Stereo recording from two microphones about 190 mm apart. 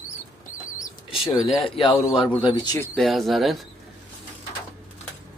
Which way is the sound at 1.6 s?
30° left (ahead or behind).